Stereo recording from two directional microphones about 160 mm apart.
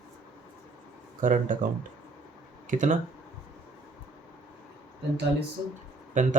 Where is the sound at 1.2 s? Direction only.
55° right (ahead or behind).